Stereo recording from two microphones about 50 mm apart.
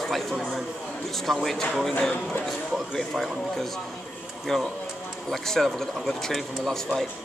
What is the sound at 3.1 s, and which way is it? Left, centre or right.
Speech, centre.